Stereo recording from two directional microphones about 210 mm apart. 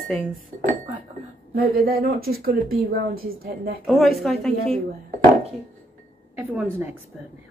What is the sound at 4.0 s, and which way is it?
Speech, centre (ahead or behind).